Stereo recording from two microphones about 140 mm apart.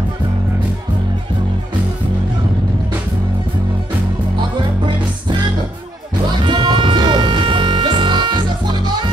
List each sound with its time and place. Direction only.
6.4 s music: 30° right (ahead or behind)